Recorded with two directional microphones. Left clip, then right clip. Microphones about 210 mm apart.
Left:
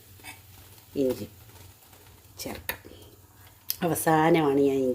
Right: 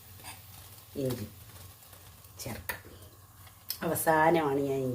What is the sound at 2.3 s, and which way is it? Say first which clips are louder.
Speech: left 4 dB; 45° left (ahead or behind).